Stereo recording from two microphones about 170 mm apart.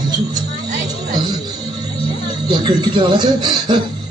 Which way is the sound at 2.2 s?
25° right (ahead or behind).